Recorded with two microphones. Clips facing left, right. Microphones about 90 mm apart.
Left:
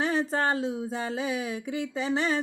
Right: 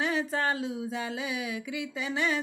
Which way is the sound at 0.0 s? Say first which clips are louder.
Left 3 dB; 35° left (ahead or behind).